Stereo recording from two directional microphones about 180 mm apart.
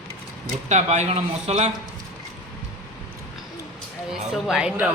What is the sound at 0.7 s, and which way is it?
A man's voice, 40° right (ahead or behind).